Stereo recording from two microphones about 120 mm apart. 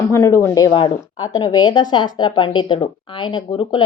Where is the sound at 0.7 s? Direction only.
40° left (ahead or behind).